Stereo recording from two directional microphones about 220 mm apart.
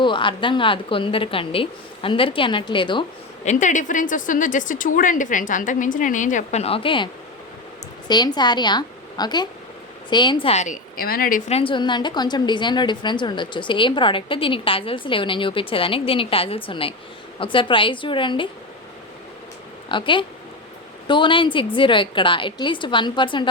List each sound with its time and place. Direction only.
0.0 s a woman's voice: 20° left (ahead or behind)
3.4 s a woman's voice: 35° left (ahead or behind)
19.9 s a woman's voice: 20° left (ahead or behind)